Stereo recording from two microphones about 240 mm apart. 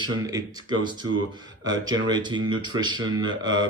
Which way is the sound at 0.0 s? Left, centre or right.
Centre.